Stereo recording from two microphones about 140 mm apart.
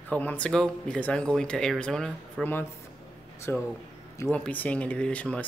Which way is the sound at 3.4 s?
20° left (ahead or behind).